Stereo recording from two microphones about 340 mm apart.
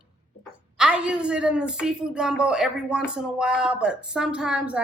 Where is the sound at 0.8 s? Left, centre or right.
Centre.